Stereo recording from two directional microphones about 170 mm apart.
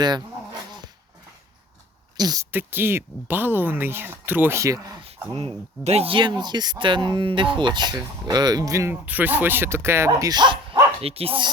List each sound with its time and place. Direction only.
2.1 s speech: 20° right (ahead or behind)
5.8 s speech: 40° right (ahead or behind)